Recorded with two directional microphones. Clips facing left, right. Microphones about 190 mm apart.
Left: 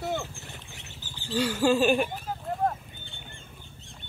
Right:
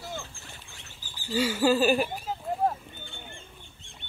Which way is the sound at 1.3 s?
5° right (ahead or behind).